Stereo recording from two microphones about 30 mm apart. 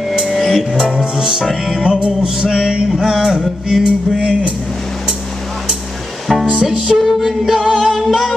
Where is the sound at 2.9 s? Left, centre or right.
Centre.